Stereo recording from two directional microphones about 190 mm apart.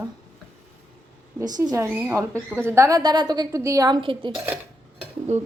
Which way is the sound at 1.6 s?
15° right (ahead or behind).